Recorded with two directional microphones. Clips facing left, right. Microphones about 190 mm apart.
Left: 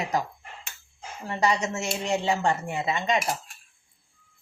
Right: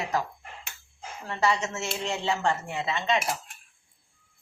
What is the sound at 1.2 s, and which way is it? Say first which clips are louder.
A woman's voice: left 1 dB; 15° left (ahead or behind).